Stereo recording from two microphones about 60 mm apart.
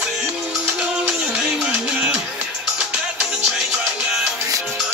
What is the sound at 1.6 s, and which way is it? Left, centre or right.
Music, centre.